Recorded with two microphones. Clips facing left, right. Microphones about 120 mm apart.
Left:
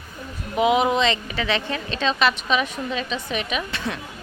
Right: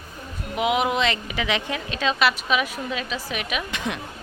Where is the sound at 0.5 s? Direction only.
5° right (ahead or behind).